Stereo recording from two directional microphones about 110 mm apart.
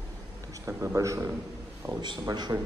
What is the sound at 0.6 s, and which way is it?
A man's voice, 25° right (ahead or behind).